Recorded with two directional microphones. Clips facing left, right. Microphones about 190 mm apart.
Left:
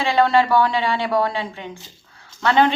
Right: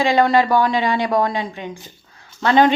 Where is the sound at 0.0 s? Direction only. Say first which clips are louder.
Right 2 dB; 15° right (ahead or behind).